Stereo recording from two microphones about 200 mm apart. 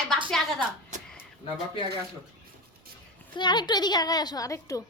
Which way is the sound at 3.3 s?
20° left (ahead or behind).